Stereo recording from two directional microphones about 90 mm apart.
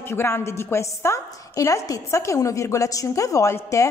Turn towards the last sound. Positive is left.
turn(degrees=35)  # may be behind; listen again after turning